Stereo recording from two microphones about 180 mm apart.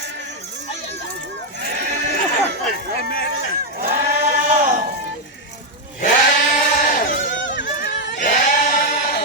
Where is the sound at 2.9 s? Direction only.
60° left (ahead or behind).